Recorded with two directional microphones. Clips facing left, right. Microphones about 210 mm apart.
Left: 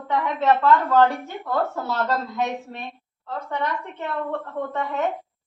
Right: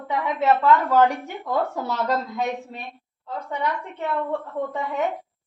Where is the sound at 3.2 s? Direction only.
10° right (ahead or behind).